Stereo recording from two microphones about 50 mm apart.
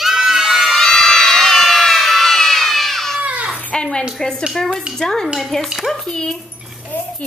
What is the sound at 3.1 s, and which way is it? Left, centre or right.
Baby cry, right.